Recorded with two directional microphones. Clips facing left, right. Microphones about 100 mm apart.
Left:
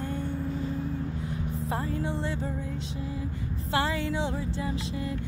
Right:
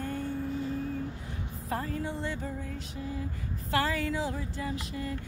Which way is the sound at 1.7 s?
25° left (ahead or behind).